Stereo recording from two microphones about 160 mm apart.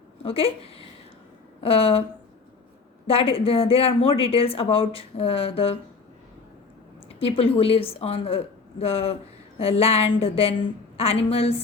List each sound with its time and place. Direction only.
0.2 s a woman's voice: 35° left (ahead or behind)
3.1 s a woman's voice: 35° left (ahead or behind)
7.2 s a woman's voice: 35° left (ahead or behind)